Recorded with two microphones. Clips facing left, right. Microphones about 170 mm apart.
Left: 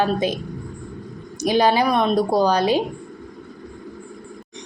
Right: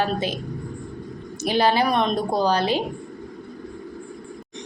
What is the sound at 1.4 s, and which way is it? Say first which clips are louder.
A woman's voice: left 3 dB; 15° left (ahead or behind).